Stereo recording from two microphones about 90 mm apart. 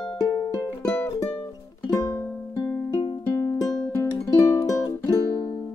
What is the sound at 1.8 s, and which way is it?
Music, 40° left (ahead or behind).